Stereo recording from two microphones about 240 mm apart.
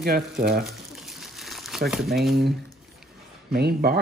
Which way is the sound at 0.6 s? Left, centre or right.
Centre.